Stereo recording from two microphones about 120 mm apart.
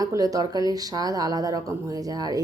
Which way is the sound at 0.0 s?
30° right (ahead or behind).